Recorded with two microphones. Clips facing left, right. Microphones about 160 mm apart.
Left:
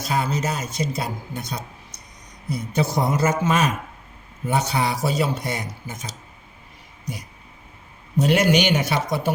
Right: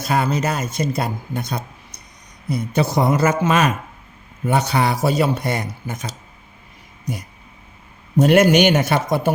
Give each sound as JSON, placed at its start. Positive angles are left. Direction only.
{"t": 0.0, "sound": "speech", "side_deg": -60}
{"t": 2.5, "sound": "a man's voice", "side_deg": -65}
{"t": 8.1, "sound": "a man's voice", "side_deg": -50}